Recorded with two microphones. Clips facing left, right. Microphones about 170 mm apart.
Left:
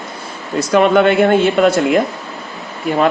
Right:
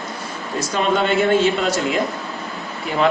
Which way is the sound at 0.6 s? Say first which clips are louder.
Left 8 dB; 60° left (ahead or behind).